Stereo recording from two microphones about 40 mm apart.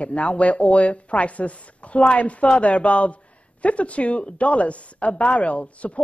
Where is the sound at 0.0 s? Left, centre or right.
Left.